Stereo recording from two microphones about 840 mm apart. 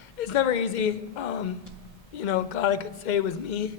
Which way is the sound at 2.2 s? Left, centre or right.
Left.